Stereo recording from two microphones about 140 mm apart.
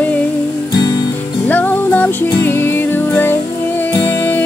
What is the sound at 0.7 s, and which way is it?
Music, 25° left (ahead or behind).